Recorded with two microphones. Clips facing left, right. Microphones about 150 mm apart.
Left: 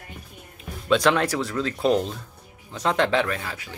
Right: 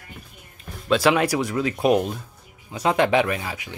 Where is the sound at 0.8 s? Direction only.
5° right (ahead or behind).